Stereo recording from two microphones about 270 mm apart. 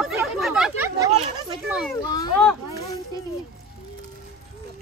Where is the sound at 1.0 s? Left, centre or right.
Right.